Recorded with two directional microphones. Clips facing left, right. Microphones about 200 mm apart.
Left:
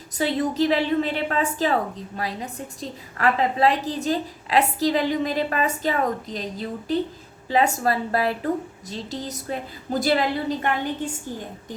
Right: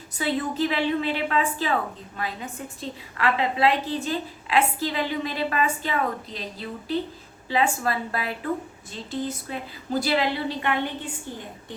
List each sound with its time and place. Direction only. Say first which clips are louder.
0.2 s a woman's voice: left 3 dB; 40° left (ahead or behind)